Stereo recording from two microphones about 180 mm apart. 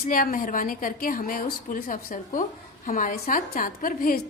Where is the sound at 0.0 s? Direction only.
50° left (ahead or behind).